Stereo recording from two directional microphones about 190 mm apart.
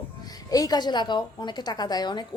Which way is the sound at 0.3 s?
20° left (ahead or behind).